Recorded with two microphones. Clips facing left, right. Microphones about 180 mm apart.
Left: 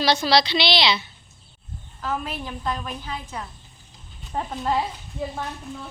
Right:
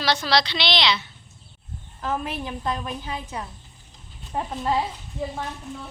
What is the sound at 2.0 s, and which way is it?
A woman's voice, 20° right (ahead or behind).